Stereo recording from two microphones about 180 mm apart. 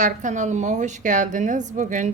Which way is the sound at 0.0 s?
45° right (ahead or behind).